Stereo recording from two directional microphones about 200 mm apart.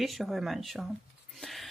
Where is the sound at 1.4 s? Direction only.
Centre (ahead or behind).